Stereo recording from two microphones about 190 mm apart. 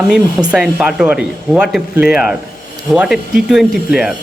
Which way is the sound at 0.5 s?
5° right (ahead or behind).